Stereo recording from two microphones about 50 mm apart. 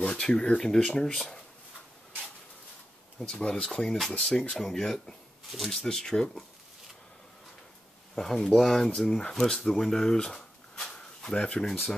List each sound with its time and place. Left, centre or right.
0.1 s speech: centre
3.2 s speech: centre
3.8 s speech: centre
8.2 s speech: centre